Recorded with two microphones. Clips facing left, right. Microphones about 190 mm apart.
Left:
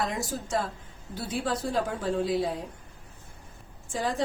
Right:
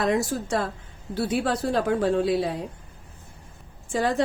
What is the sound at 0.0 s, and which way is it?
A woman's voice, 70° right (ahead or behind).